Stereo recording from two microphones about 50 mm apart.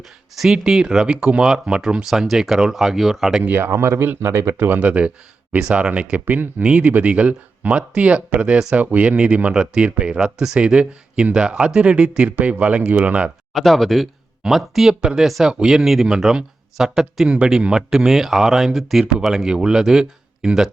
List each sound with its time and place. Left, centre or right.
0.5 s speech: centre
3.6 s speech: right
4.5 s speech: right
4.8 s speech: right
6.2 s speech: right
6.6 s speech: right
12.4 s speech: right
13.5 s speech: centre
17.2 s speech: centre
19.5 s speech: centre